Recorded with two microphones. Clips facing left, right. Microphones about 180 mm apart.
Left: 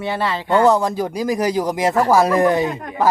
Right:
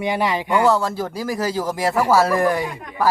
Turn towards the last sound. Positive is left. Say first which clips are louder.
# left 3 dB
turn(degrees=20)  # may be behind; listen again after turning